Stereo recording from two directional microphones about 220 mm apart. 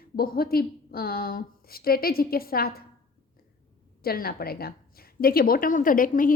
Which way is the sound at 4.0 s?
45° left (ahead or behind).